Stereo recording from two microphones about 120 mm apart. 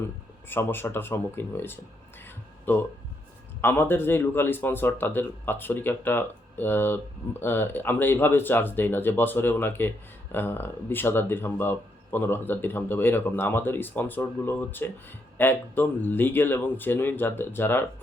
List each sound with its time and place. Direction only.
0.4 s a man's voice: 20° left (ahead or behind)
3.6 s a man's voice: 15° left (ahead or behind)